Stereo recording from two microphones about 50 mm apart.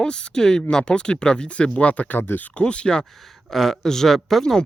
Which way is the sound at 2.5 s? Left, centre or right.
Left.